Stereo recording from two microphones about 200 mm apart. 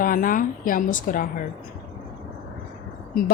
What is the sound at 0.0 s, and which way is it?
Speech, 45° left (ahead or behind).